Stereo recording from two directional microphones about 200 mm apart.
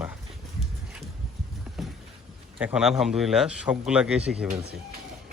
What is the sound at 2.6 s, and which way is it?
Speech, 5° right (ahead or behind).